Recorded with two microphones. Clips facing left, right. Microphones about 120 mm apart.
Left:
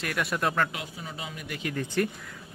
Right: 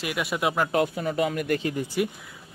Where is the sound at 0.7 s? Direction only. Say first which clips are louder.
Right 14 dB; 55° right (ahead or behind).